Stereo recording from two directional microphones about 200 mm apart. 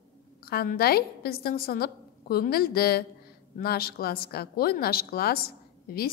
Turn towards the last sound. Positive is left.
turn(degrees=50)  # may be behind; listen again after turning